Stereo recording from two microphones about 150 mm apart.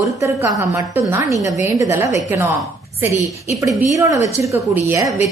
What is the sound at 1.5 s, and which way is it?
Speech, 20° right (ahead or behind).